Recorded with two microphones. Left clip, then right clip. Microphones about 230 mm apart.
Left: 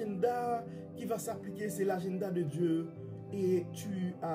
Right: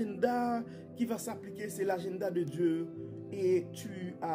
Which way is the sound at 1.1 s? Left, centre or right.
Right.